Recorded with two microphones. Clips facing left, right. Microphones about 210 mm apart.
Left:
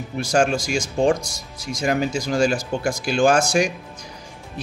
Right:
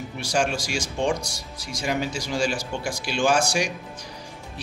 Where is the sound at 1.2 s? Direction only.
20° left (ahead or behind).